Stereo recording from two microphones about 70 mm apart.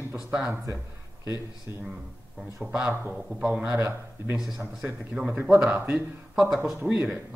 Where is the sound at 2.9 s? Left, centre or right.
Right.